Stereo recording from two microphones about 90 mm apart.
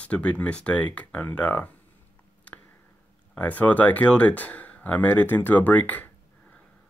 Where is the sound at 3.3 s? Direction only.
15° left (ahead or behind).